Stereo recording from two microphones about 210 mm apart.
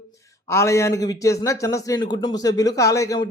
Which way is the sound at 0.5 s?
15° left (ahead or behind).